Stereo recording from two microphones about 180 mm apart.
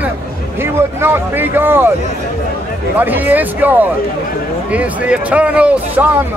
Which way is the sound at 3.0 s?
10° right (ahead or behind).